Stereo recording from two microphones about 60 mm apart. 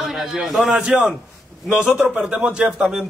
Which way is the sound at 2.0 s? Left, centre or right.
Centre.